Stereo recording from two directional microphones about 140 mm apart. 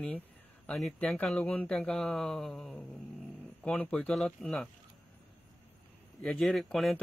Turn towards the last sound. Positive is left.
turn(degrees=0)  # may be behind; listen again after turning